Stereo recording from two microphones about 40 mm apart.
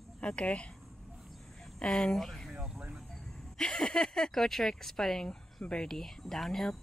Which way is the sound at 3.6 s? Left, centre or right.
Left.